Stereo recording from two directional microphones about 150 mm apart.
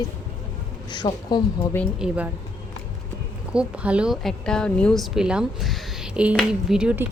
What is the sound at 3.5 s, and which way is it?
A woman's voice, 5° right (ahead or behind).